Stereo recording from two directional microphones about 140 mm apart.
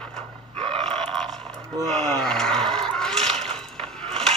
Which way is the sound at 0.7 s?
5° left (ahead or behind).